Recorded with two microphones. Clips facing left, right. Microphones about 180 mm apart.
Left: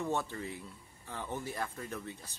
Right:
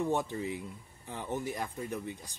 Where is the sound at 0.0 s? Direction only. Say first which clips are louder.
Right 4 dB; 15° right (ahead or behind).